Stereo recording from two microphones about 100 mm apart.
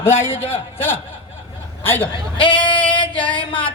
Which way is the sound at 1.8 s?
20° left (ahead or behind).